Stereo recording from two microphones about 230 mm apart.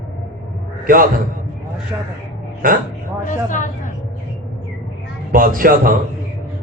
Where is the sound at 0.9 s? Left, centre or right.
Right.